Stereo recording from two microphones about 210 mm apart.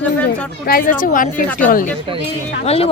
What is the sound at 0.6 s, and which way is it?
A woman's voice, 45° left (ahead or behind).